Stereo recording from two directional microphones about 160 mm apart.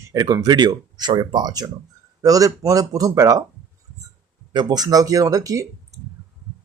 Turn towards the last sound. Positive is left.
turn(degrees=-20)  # may be behind; listen again after turning